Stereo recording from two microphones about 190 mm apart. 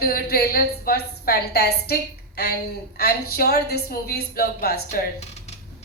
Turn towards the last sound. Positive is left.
turn(degrees=50)  # may be behind; listen again after turning